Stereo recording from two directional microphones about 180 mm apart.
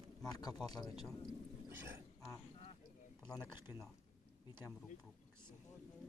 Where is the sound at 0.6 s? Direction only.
20° left (ahead or behind).